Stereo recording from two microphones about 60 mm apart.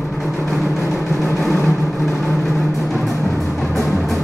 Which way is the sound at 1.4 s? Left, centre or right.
Centre.